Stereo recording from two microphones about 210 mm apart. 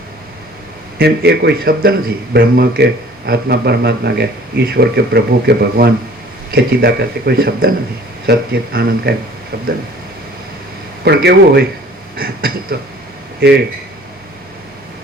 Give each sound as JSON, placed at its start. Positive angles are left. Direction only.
{"t": 0.9, "sound": "speech", "side_deg": -50}
{"t": 11.0, "sound": "speech", "side_deg": -50}